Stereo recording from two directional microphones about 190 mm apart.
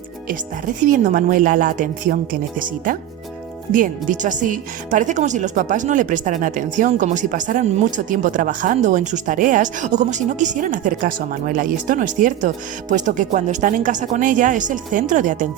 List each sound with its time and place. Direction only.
0.8 s speech: 45° right (ahead or behind)